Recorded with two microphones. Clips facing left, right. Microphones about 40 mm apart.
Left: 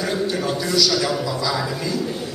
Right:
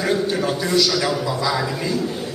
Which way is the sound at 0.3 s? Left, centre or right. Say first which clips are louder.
Right 2 dB; centre.